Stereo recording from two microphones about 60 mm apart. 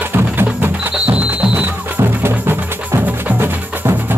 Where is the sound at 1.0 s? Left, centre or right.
Centre.